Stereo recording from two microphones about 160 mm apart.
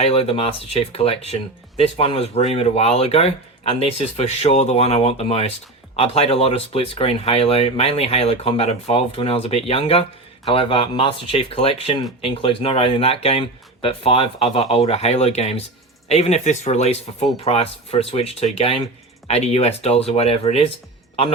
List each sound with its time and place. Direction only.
0.0 s speech: 40° left (ahead or behind)